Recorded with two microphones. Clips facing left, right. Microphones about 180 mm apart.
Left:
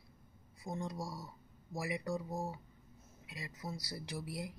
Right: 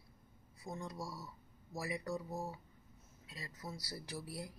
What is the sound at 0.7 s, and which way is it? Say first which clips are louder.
Speech: left 3 dB; 20° left (ahead or behind).